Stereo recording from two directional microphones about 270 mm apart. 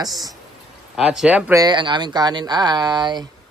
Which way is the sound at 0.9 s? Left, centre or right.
Centre.